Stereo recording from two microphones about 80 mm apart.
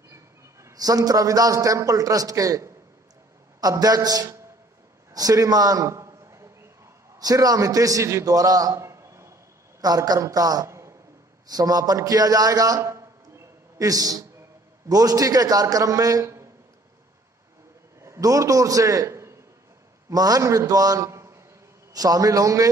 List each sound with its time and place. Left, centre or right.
0.1 s a sound: right
0.7 s a man's voice: right
3.8 s a man's voice: right
5.1 s a sound: right
7.2 s a man's voice: right
9.8 s a man's voice: right
11.4 s a man's voice: right
18.0 s a man's voice: right
20.1 s a man's voice: right
21.9 s a man's voice: right